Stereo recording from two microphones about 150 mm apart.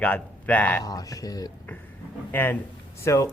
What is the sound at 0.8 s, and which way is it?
Speech, 25° left (ahead or behind).